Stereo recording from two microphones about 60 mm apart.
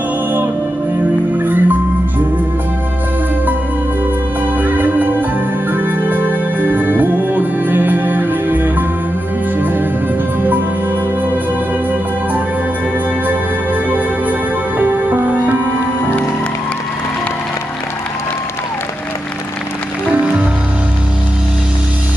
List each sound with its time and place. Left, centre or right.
1.4 s music: right
4.6 s music: right
13.8 s music: right